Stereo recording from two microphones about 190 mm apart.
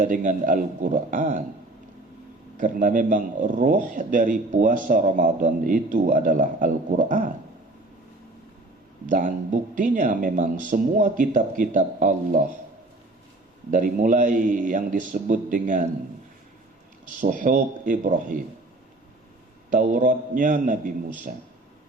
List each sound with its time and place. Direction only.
0.0 s a man's voice: 40° right (ahead or behind)
2.6 s a man's voice: 45° right (ahead or behind)
9.0 s a man's voice: 45° right (ahead or behind)
13.7 s a man's voice: 45° right (ahead or behind)
17.2 s a man's voice: 45° right (ahead or behind)
19.7 s a man's voice: 40° right (ahead or behind)